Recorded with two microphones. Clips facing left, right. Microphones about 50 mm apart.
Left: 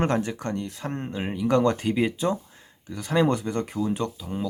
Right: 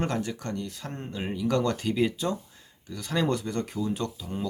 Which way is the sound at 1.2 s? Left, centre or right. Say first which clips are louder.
Left 4 dB; left.